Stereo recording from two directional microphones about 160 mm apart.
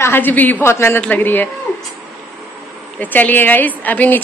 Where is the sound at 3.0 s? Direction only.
10° left (ahead or behind).